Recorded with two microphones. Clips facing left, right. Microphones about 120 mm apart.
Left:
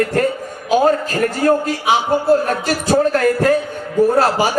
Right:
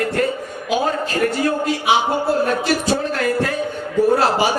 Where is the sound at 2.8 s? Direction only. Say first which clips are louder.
Left 6 dB; 45° left (ahead or behind).